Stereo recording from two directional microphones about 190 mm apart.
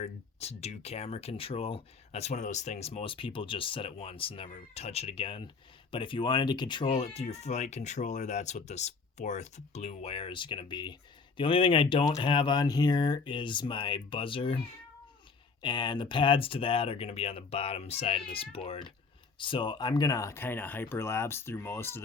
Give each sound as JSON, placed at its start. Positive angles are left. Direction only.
{"t": 0.0, "sound": "speech", "side_deg": 35}